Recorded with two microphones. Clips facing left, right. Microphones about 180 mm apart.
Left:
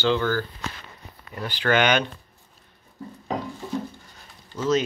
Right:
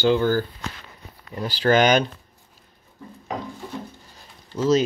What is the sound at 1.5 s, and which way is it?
Speech, 35° right (ahead or behind).